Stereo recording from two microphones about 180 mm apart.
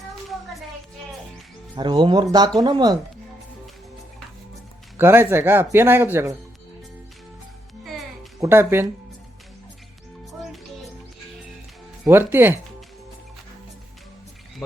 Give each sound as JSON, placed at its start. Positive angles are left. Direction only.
{"t": 1.7, "sound": "speech", "side_deg": -25}
{"t": 4.9, "sound": "a man's voice", "side_deg": -10}
{"t": 8.4, "sound": "a man's voice", "side_deg": -15}
{"t": 12.0, "sound": "a man's voice", "side_deg": -10}